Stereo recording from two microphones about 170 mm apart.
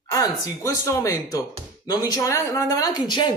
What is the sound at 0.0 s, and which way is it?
Speech, 20° left (ahead or behind).